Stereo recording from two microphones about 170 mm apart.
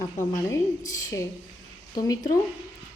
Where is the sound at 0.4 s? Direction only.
20° left (ahead or behind).